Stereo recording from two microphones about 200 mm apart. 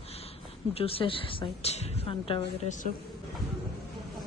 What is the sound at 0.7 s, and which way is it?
A woman's voice, 30° left (ahead or behind).